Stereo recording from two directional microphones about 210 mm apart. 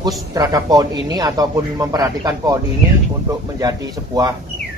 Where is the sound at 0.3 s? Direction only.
15° right (ahead or behind).